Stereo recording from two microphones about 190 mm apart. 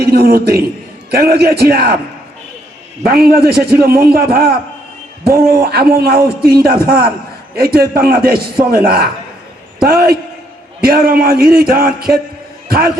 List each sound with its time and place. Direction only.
0.0 s a man's voice: 55° right (ahead or behind)
3.0 s a man's voice: 55° right (ahead or behind)
5.5 s a man's voice: 55° right (ahead or behind)